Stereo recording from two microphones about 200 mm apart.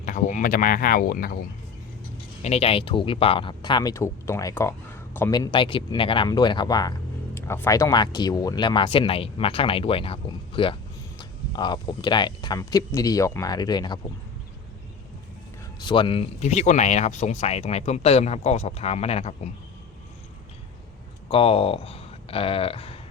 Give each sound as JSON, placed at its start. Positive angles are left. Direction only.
{"t": 0.0, "sound": "speech", "side_deg": 40}
{"t": 2.4, "sound": "speech", "side_deg": 30}
{"t": 15.8, "sound": "speech", "side_deg": 25}
{"t": 21.2, "sound": "speech", "side_deg": 30}